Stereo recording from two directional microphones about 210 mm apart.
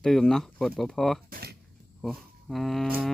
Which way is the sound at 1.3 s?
45° right (ahead or behind).